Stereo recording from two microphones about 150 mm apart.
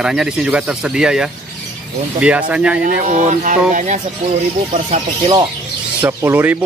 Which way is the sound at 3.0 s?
50° right (ahead or behind).